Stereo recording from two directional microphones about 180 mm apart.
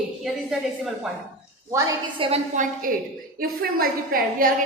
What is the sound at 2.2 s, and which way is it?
Speech, 30° right (ahead or behind).